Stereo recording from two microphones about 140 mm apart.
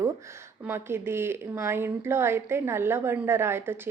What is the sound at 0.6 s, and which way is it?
A woman's voice, 15° right (ahead or behind).